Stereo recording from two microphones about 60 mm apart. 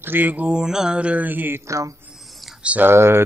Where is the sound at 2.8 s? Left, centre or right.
Right.